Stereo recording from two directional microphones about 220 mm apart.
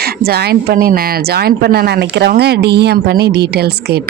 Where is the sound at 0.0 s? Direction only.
45° right (ahead or behind).